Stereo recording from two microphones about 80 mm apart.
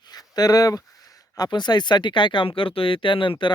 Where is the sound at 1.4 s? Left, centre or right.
Left.